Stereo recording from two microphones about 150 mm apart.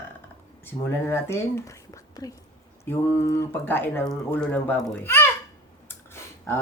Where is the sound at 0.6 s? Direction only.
15° left (ahead or behind).